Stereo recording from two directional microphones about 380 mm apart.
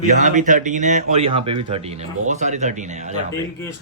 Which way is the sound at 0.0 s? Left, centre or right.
Centre.